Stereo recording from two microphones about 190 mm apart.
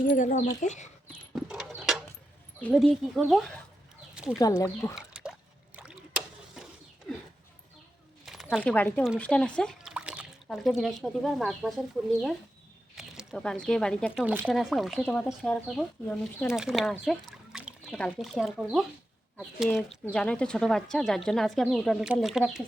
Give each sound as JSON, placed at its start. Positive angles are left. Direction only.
{"t": 0.2, "sound": "speech", "side_deg": 40}
{"t": 1.3, "sound": "a sound", "side_deg": -5}
{"t": 2.6, "sound": "speech", "side_deg": 5}
{"t": 4.1, "sound": "chicken", "side_deg": -5}
{"t": 4.4, "sound": "speech", "side_deg": 15}
{"t": 4.9, "sound": "a sound", "side_deg": -5}
{"t": 8.2, "sound": "a sound", "side_deg": 0}
{"t": 8.7, "sound": "speech", "side_deg": 10}
{"t": 9.9, "sound": "speech", "side_deg": -5}
{"t": 14.3, "sound": "speech", "side_deg": -5}
{"t": 16.9, "sound": "a sound", "side_deg": 0}
{"t": 17.9, "sound": "speech", "side_deg": 0}